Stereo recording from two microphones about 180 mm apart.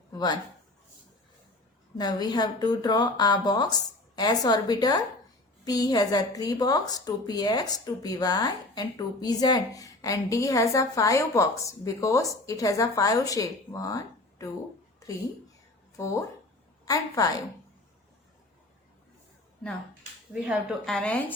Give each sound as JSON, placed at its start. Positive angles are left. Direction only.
{"t": 0.1, "sound": "a sound", "side_deg": 20}
{"t": 2.0, "sound": "a woman's voice", "side_deg": 20}
{"t": 16.0, "sound": "a woman's voice", "side_deg": 15}
{"t": 20.3, "sound": "a woman's voice", "side_deg": -5}